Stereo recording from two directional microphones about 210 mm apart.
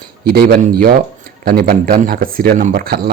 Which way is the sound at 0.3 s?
45° right (ahead or behind).